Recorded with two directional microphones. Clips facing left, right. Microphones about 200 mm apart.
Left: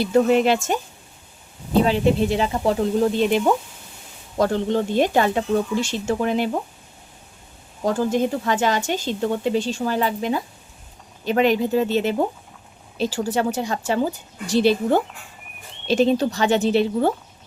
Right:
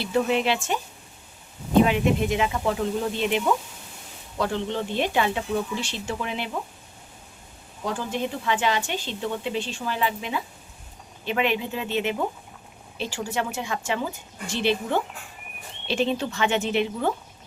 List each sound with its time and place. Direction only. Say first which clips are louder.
0.0 s a woman's voice: left 6 dB; 45° left (ahead or behind)
7.9 s a woman's voice: left 8 dB; 45° left (ahead or behind)